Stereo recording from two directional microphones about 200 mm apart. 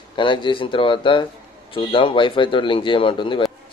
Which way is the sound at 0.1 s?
25° left (ahead or behind).